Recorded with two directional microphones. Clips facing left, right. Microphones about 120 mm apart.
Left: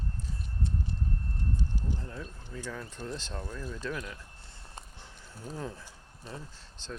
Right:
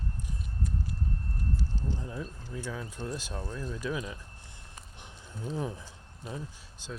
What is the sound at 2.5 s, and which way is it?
Speech, 10° right (ahead or behind).